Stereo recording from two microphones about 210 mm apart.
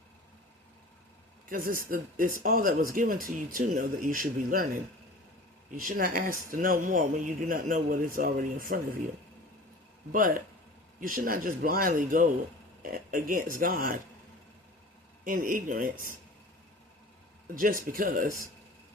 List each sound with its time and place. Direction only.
1.5 s speech: 40° right (ahead or behind)
5.7 s speech: 40° right (ahead or behind)
10.1 s speech: 40° right (ahead or behind)
15.2 s speech: 40° right (ahead or behind)
17.5 s speech: 40° right (ahead or behind)